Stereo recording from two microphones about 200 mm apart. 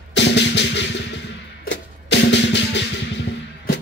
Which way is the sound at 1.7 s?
60° left (ahead or behind).